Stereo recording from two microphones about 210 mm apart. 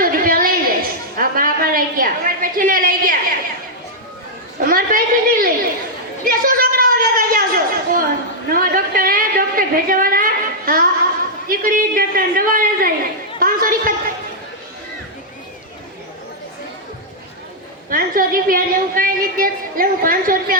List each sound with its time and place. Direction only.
0.0 s a sound: 40° right (ahead or behind)
4.6 s a woman's voice: 45° right (ahead or behind)
6.2 s a sound: 45° right (ahead or behind)
11.4 s a woman's voice: 40° right (ahead or behind)
13.4 s chatter: 40° right (ahead or behind)
17.8 s a woman's voice: 40° right (ahead or behind)